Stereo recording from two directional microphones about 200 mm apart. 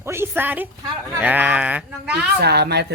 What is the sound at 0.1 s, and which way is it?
Speech, 10° right (ahead or behind).